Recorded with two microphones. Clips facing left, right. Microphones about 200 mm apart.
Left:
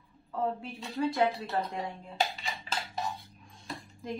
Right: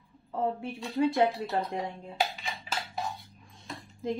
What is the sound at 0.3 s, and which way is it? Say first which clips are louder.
Speech: right 2 dB; 25° right (ahead or behind).